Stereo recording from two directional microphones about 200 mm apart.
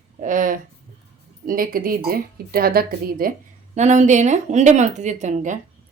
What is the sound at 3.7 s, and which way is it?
A woman's voice, 35° right (ahead or behind).